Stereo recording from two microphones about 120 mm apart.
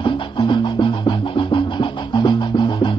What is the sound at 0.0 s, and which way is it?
Music, 40° left (ahead or behind).